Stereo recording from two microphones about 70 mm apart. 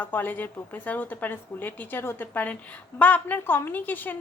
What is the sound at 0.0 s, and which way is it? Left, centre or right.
A woman's voice, left.